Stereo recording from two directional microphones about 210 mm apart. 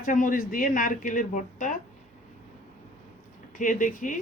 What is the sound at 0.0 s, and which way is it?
Speech, 40° left (ahead or behind).